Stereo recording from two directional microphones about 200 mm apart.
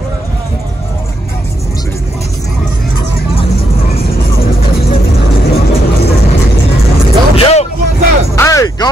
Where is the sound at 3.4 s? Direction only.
30° left (ahead or behind).